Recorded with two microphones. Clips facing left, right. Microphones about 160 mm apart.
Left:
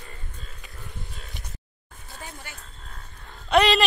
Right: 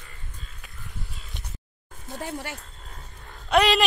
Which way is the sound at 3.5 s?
5° right (ahead or behind).